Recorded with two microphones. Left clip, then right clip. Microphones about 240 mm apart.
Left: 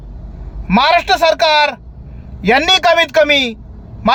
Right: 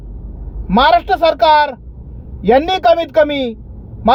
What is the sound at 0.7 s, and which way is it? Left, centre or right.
Speech, centre.